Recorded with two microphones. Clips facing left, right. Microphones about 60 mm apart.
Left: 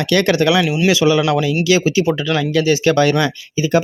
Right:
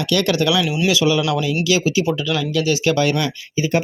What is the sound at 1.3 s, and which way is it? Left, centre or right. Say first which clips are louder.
Speech: left 4 dB; left.